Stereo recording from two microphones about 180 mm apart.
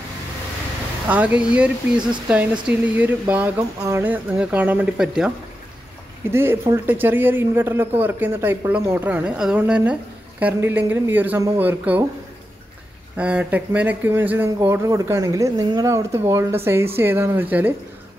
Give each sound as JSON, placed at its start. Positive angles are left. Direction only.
{"t": 1.0, "sound": "speech", "side_deg": -10}
{"t": 6.3, "sound": "speech", "side_deg": -15}
{"t": 13.1, "sound": "speech", "side_deg": -5}